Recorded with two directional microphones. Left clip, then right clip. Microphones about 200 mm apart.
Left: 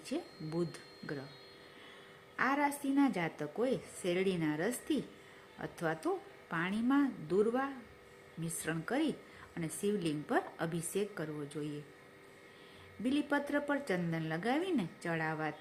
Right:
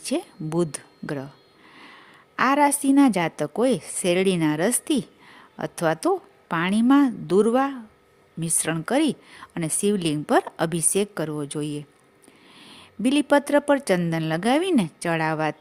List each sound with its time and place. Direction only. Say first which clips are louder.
0.0 s speech: right 13 dB; 60° right (ahead or behind)
2.3 s speech: right 13 dB; 60° right (ahead or behind)